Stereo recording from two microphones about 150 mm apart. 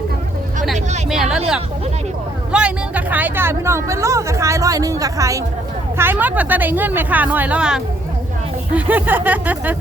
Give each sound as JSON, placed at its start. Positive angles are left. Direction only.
{"t": 1.1, "sound": "speech", "side_deg": -5}
{"t": 2.5, "sound": "speech", "side_deg": -5}